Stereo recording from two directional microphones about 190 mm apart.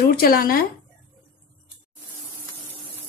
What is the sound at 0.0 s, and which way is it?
Speech, 50° left (ahead or behind).